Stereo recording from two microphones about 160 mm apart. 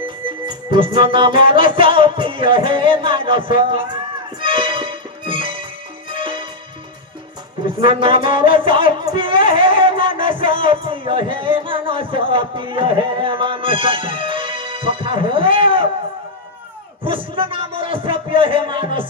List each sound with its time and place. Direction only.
0.4 s music: 30° right (ahead or behind)
7.8 s music: 30° right (ahead or behind)
17.0 s speech: 35° right (ahead or behind)